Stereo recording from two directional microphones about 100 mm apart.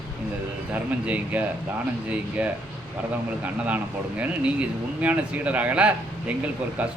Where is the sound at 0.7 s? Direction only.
15° right (ahead or behind).